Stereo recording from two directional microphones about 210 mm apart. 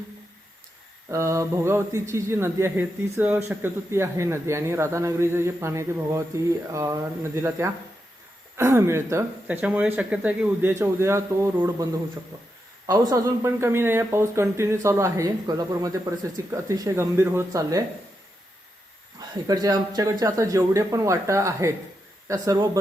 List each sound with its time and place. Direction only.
1.1 s speech: 15° right (ahead or behind)
12.9 s speech: 15° right (ahead or behind)
19.5 s speech: 15° right (ahead or behind)